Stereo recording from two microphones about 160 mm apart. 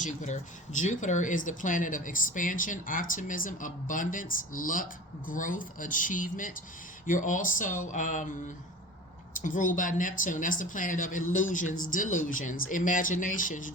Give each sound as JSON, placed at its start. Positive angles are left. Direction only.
{"t": 0.0, "sound": "speech", "side_deg": 50}
{"t": 9.3, "sound": "speech", "side_deg": 55}